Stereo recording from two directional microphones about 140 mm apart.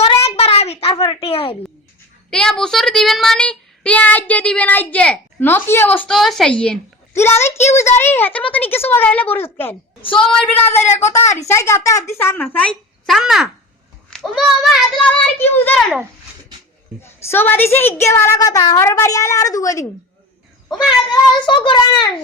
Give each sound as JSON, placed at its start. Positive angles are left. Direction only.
{"t": 0.0, "sound": "a sound", "side_deg": 45}
{"t": 2.3, "sound": "child singing", "side_deg": 5}
{"t": 6.1, "sound": "a child's voice", "side_deg": 0}
{"t": 7.1, "sound": "a woman's voice", "side_deg": 20}
{"t": 7.7, "sound": "child singing", "side_deg": 20}
{"t": 10.2, "sound": "a child's voice", "side_deg": 5}
{"t": 11.1, "sound": "a woman's voice", "side_deg": 20}
{"t": 12.5, "sound": "a child's voice", "side_deg": 5}
{"t": 15.4, "sound": "child singing", "side_deg": 15}
{"t": 17.0, "sound": "a woman's voice", "side_deg": 15}